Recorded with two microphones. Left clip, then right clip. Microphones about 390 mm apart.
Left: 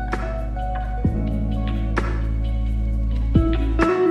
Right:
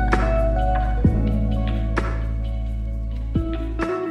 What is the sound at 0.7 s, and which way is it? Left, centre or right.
Music, right.